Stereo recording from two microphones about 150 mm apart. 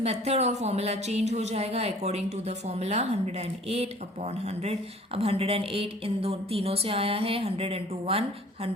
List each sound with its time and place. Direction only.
0.0 s speech: 45° right (ahead or behind)